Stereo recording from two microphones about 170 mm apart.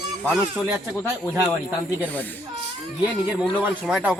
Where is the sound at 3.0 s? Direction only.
10° right (ahead or behind).